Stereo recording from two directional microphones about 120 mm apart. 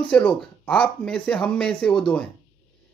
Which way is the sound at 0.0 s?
15° left (ahead or behind).